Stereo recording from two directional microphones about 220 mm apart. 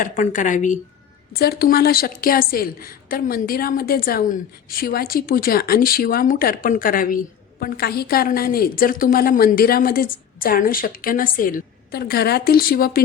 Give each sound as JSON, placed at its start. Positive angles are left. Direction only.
{"t": 0.0, "sound": "a woman's voice", "side_deg": 35}